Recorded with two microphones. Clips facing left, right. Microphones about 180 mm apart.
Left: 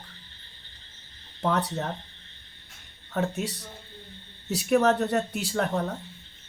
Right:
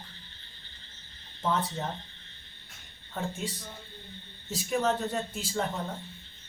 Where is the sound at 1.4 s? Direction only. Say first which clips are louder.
Left 3 dB; 70° left (ahead or behind).